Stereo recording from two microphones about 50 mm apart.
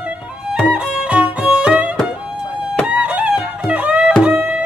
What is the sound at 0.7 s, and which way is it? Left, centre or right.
Music, right.